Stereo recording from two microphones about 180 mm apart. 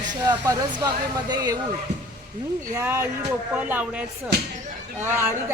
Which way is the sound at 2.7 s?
15° right (ahead or behind).